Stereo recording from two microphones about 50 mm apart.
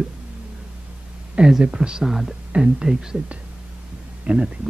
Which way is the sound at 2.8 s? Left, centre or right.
Right.